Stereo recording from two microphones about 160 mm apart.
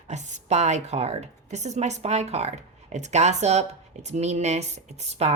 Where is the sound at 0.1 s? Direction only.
45° right (ahead or behind).